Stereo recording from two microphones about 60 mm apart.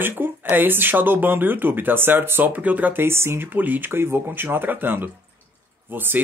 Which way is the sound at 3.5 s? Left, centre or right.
Right.